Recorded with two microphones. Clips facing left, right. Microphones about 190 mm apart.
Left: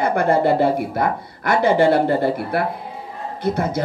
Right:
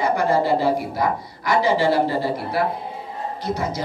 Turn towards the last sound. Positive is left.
turn(degrees=55)  # may be behind; listen again after turning